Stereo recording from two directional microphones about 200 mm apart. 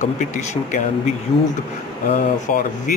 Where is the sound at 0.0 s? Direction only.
40° left (ahead or behind).